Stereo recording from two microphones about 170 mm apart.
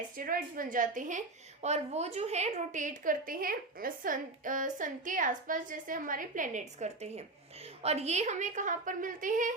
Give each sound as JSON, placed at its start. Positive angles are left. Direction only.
{"t": 0.2, "sound": "a woman's voice", "side_deg": -55}